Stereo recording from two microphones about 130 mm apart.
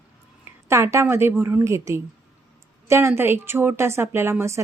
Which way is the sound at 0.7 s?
20° right (ahead or behind).